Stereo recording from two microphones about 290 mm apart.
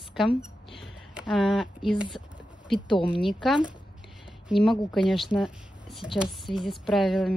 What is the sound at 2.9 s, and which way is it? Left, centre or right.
Speech, centre.